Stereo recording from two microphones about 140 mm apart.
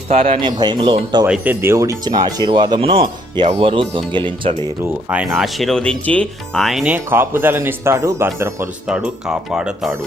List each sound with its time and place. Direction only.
0.1 s speech: 60° right (ahead or behind)
0.4 s speech: 30° right (ahead or behind)
1.3 s speech: 15° right (ahead or behind); by 4.5 s 35° right (ahead or behind)
4.8 s speech: 15° right (ahead or behind)
5.2 s speech: centre (ahead or behind)
6.9 s speech: 15° right (ahead or behind)
8.9 s speech: 5° right (ahead or behind)